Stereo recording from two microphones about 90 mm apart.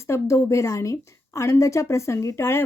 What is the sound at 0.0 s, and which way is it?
A woman's voice, 30° left (ahead or behind).